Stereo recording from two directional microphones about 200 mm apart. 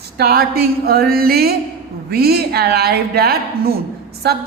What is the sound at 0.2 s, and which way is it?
A woman's voice, 50° right (ahead or behind).